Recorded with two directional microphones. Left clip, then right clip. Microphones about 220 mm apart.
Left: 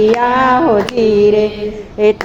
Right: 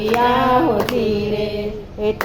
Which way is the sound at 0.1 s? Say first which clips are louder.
Left 4 dB; 25° left (ahead or behind).